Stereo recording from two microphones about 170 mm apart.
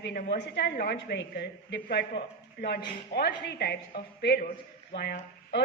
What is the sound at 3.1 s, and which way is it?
A woman's voice, 75° left (ahead or behind).